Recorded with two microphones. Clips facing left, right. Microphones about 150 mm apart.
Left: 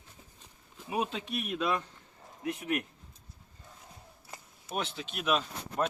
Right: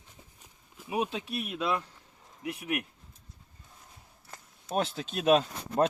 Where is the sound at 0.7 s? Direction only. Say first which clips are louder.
Right 2 dB; 10° right (ahead or behind).